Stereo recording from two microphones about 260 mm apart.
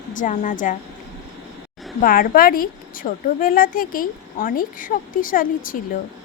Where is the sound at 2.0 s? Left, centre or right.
Left.